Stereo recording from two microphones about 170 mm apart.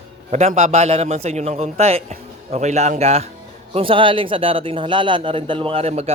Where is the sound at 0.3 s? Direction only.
40° right (ahead or behind).